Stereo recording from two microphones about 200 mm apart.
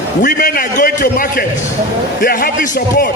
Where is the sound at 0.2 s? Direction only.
45° left (ahead or behind).